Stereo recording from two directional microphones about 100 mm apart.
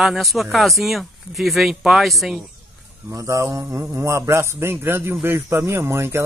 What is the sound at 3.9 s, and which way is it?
Speech, 25° right (ahead or behind).